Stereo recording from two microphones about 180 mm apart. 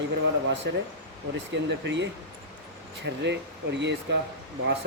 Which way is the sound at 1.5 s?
85° right.